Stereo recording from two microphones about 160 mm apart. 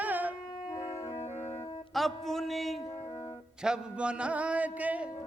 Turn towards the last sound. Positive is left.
turn(degrees=-10)  # may be behind; listen again after turning